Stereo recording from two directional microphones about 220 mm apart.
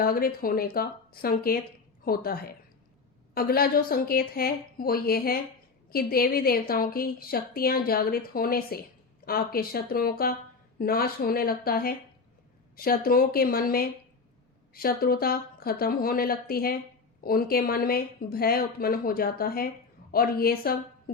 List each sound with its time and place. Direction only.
0.0 s speech: 40° left (ahead or behind)